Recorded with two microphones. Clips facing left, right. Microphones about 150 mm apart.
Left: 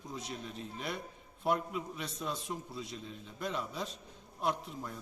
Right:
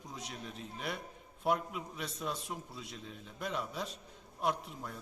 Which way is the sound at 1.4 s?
5° right (ahead or behind).